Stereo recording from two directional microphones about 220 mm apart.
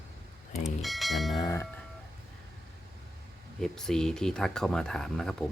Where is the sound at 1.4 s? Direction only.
15° left (ahead or behind).